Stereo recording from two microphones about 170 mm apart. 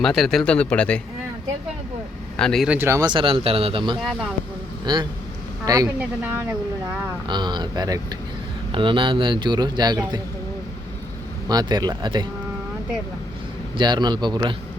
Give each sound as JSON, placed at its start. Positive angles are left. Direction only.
{"t": 0.0, "sound": "speech", "side_deg": 0}
{"t": 2.3, "sound": "speech", "side_deg": 5}
{"t": 2.6, "sound": "speech", "side_deg": -15}
{"t": 7.3, "sound": "speech", "side_deg": -25}
{"t": 11.4, "sound": "speech", "side_deg": -25}
{"t": 13.7, "sound": "speech", "side_deg": -25}